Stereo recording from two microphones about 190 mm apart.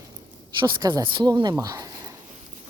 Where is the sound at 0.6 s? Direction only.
20° right (ahead or behind).